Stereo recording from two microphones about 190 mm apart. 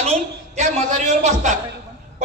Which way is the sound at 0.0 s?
35° right (ahead or behind).